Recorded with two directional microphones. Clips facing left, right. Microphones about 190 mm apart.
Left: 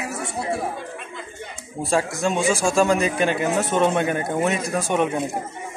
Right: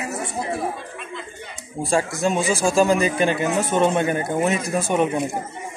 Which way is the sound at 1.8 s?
Centre (ahead or behind).